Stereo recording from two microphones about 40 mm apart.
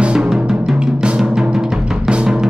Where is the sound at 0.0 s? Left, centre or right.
Right.